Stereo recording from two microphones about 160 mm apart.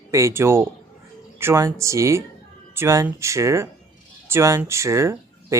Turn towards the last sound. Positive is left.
turn(degrees=-15)  # may be behind; listen again after turning